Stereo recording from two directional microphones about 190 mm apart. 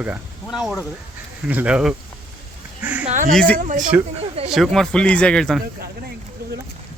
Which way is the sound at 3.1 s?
45° right (ahead or behind).